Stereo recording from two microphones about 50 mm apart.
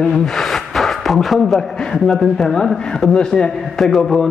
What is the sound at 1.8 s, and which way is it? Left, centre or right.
Speech, centre.